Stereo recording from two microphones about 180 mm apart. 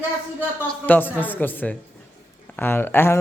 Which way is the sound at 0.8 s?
10° left (ahead or behind).